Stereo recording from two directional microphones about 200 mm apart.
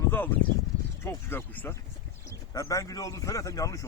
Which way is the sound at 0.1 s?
10° left (ahead or behind).